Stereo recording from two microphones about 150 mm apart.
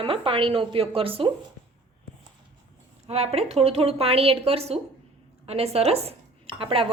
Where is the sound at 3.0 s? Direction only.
45° right (ahead or behind).